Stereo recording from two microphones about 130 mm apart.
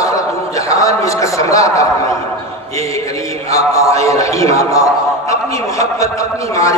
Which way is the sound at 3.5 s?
25° left (ahead or behind).